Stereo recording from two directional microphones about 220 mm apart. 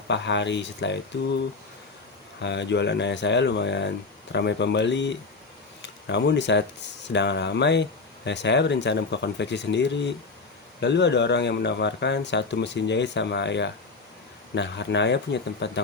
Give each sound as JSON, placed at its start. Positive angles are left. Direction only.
{"t": 0.1, "sound": "speech", "side_deg": 55}
{"t": 2.4, "sound": "speech", "side_deg": 55}